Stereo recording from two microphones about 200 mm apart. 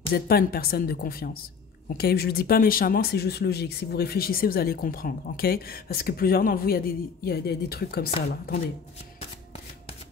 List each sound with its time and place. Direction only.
0.1 s speech: 50° left (ahead or behind)